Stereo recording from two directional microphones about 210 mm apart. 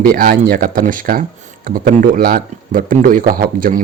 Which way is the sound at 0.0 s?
45° right (ahead or behind).